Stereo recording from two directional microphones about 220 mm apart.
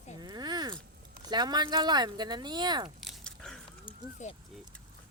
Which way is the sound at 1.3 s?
20° right (ahead or behind).